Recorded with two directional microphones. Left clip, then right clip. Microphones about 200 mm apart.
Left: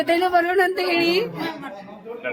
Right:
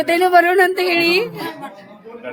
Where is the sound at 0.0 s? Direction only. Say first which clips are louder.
Right 6 dB; 25° right (ahead or behind).